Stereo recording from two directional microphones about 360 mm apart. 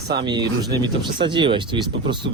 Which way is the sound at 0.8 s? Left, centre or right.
Centre.